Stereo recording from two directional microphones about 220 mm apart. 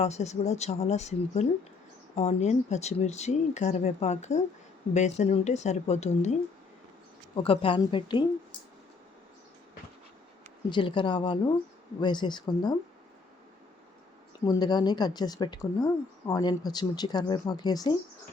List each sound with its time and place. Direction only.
0.0 s speech: 30° left (ahead or behind)
7.3 s speech: 25° left (ahead or behind)
10.7 s speech: 20° left (ahead or behind)
14.4 s speech: 15° left (ahead or behind)